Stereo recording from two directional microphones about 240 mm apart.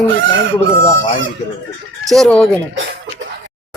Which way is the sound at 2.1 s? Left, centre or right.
Centre.